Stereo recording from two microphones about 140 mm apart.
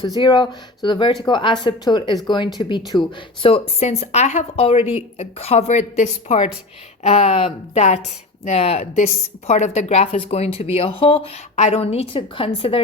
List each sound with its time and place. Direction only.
0.2 s speech: 30° left (ahead or behind); by 4.6 s 55° left (ahead or behind)
4.6 s speech: 45° left (ahead or behind)